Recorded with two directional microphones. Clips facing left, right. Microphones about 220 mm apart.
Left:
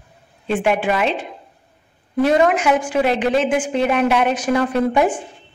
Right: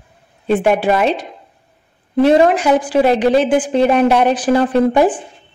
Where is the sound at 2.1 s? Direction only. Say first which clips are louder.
Right 4 dB; 30° right (ahead or behind).